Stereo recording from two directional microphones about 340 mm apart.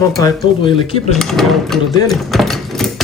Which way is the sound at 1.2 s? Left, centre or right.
Centre.